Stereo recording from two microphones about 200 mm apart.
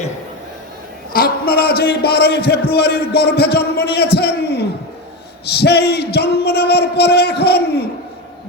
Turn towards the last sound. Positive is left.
turn(degrees=55)  # may be behind; listen again after turning